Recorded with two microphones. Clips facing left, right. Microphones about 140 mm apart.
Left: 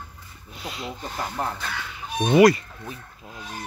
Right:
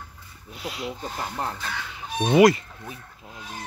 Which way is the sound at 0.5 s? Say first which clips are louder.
Right 2 dB; 5° right (ahead or behind).